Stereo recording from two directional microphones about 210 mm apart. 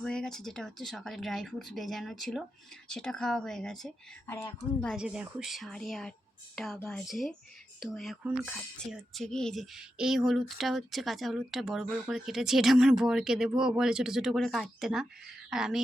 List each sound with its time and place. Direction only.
0.0 s speech: 5° left (ahead or behind)
4.9 s speech: 5° right (ahead or behind)